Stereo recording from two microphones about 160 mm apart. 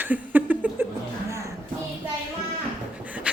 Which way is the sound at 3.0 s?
10° right (ahead or behind).